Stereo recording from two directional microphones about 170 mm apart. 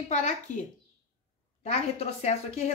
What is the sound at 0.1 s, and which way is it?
Speech, 45° left (ahead or behind).